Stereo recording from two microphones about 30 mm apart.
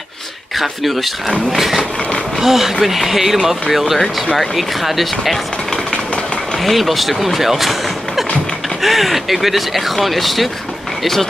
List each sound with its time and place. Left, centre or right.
0.6 s speech: centre
6.6 s speech: centre
8.8 s speech: centre